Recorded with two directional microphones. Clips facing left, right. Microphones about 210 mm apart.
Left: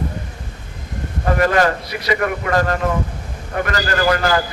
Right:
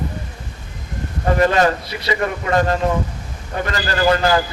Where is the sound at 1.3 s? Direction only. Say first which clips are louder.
Right 1 dB; 25° right (ahead or behind).